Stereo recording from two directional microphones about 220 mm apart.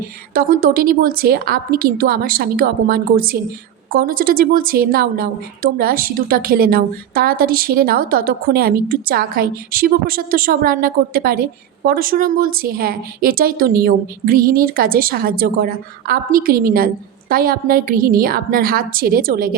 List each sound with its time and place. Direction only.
0.3 s a woman's voice: 40° right (ahead or behind)